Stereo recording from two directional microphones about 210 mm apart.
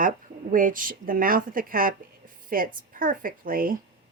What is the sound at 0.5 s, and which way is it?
A woman's voice, 40° right (ahead or behind).